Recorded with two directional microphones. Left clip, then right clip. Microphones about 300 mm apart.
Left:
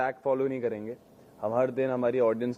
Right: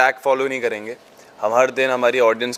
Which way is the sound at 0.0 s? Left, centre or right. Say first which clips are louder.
Right 11 dB; centre.